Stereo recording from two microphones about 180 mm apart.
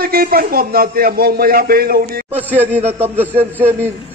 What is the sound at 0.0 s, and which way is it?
Speech, 55° right (ahead or behind).